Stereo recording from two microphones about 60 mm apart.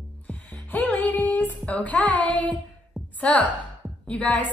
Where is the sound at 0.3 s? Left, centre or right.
Left.